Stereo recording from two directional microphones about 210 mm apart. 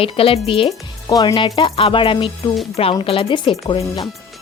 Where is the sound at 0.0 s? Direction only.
25° left (ahead or behind).